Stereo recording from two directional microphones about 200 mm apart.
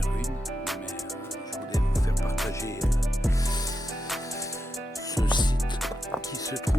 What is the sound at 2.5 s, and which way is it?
Music, 15° left (ahead or behind).